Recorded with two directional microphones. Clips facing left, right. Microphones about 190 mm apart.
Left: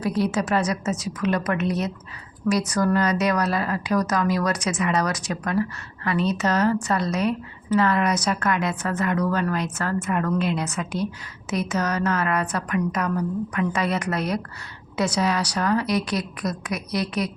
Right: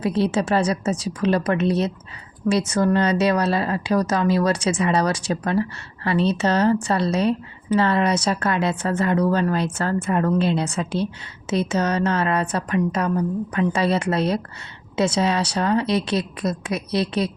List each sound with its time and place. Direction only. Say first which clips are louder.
0.0 s a woman's voice: right 2 dB; 25° right (ahead or behind)